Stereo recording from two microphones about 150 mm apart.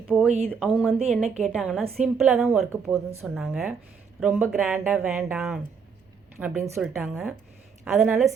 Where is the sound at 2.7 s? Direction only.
20° right (ahead or behind).